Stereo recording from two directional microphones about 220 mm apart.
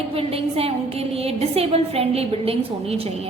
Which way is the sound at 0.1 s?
25° right (ahead or behind).